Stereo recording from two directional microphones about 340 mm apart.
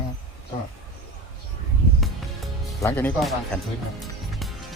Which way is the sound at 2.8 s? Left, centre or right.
Centre.